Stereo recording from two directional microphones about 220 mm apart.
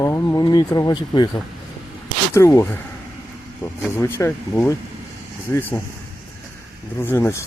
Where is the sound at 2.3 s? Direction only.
10° left (ahead or behind).